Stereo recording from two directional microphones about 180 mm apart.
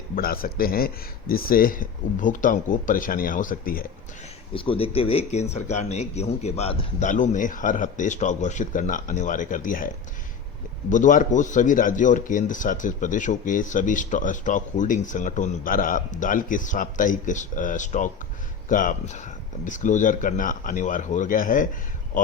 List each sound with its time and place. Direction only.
0.2 s a man's voice: 55° left (ahead or behind)
4.5 s a man's voice: 30° left (ahead or behind); by 22.3 s 45° left (ahead or behind)